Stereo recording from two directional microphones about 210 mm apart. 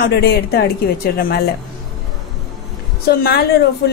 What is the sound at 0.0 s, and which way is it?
A woman's voice, 50° left (ahead or behind).